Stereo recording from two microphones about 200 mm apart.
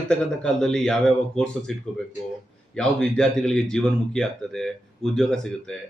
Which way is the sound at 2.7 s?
5° left (ahead or behind).